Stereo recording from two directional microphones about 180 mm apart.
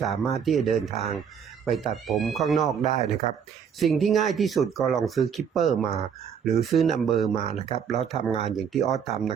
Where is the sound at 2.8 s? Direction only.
45° left (ahead or behind).